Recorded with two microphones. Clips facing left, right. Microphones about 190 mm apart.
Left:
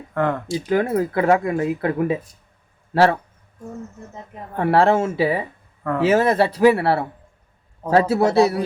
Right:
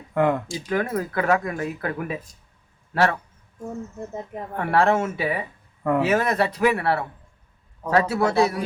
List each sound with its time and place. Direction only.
0.1 s speech: 10° right (ahead or behind)
0.7 s speech: 30° left (ahead or behind)
4.5 s speech: 30° left (ahead or behind)